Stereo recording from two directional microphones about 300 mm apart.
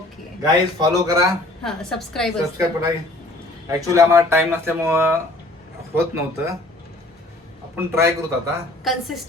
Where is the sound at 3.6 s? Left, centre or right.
Centre.